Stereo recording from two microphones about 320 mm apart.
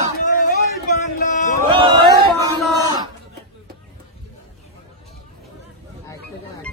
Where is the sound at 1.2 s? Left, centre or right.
Left.